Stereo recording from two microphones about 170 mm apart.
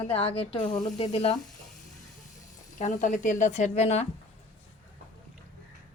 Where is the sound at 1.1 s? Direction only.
40° left (ahead or behind).